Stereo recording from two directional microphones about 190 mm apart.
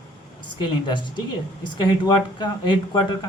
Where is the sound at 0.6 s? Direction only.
25° left (ahead or behind).